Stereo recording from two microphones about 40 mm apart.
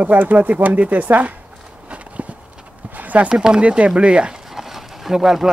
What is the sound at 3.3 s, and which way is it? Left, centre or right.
Speech, right.